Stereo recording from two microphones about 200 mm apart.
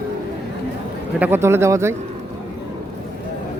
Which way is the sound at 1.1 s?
10° right (ahead or behind).